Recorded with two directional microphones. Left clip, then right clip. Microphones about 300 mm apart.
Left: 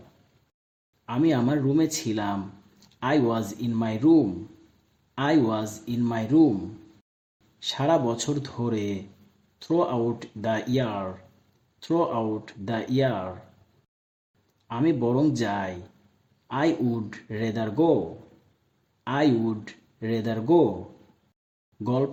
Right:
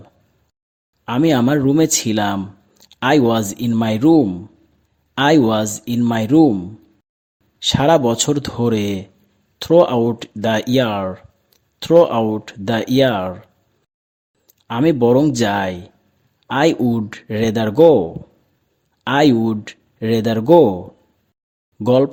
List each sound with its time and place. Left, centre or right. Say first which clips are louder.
1.0 s speech: right 8 dB; right
7.6 s speech: right 10 dB; right
14.7 s speech: right 11 dB; right
19.0 s speech: right 9 dB; right
21.8 s speech: right 12 dB; right